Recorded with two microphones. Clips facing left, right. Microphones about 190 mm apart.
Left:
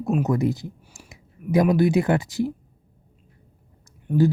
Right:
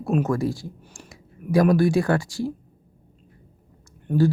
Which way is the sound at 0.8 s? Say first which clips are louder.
Right 4 dB; 10° left (ahead or behind).